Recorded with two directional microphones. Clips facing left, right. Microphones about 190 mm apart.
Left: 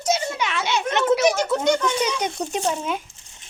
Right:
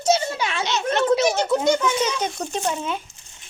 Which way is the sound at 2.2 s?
15° left (ahead or behind).